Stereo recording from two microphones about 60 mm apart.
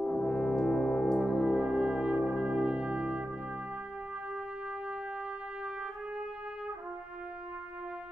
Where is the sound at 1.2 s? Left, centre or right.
Centre.